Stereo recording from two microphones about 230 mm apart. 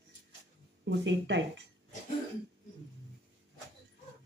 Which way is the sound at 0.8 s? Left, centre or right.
Right.